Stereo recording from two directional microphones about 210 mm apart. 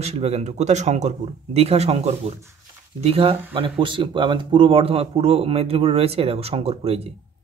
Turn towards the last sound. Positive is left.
turn(degrees=-30)  # may be behind; listen again after turning